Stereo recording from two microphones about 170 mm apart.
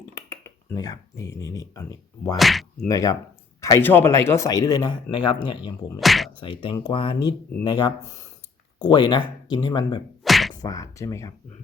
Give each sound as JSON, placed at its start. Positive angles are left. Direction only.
{"t": 0.1, "sound": "speech", "side_deg": 15}
{"t": 2.3, "sound": "speech", "side_deg": 0}
{"t": 2.8, "sound": "speech", "side_deg": 20}
{"t": 6.0, "sound": "speech", "side_deg": 0}
{"t": 6.4, "sound": "speech", "side_deg": 30}
{"t": 10.2, "sound": "whack", "side_deg": 0}
{"t": 10.5, "sound": "speech", "side_deg": 20}